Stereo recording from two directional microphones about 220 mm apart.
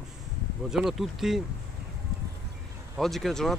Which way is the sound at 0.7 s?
Centre (ahead or behind).